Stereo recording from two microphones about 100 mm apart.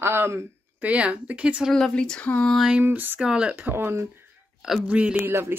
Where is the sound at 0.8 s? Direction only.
10° right (ahead or behind).